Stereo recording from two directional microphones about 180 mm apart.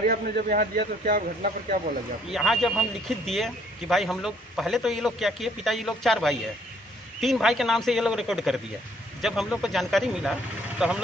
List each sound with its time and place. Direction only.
0.0 s speech: 50° right (ahead or behind)
2.3 s speech: centre (ahead or behind)